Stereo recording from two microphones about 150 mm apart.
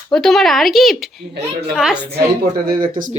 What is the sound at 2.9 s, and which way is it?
Speech, 65° right (ahead or behind).